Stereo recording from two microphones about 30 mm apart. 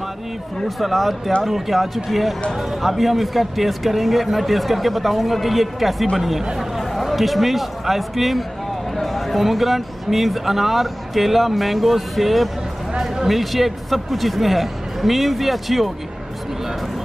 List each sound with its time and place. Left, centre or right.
0.7 s speech: centre
13.0 s a sound: centre
13.3 s speech: centre